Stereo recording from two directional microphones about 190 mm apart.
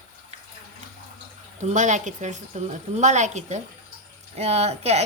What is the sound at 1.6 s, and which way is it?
Speech, 40° right (ahead or behind).